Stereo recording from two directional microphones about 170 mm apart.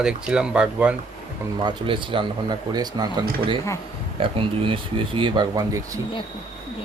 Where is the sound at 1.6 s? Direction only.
30° right (ahead or behind).